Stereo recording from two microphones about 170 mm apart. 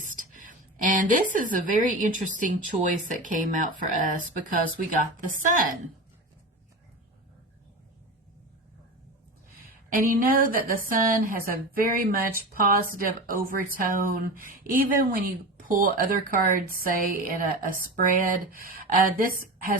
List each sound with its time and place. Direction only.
0.1 s speech: 50° right (ahead or behind)
9.9 s speech: 55° right (ahead or behind)